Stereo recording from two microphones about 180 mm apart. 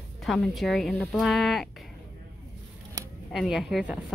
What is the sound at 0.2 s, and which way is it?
Speech, centre (ahead or behind).